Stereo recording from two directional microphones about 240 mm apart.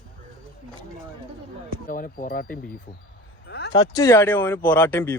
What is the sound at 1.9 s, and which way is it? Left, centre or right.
Speech, left.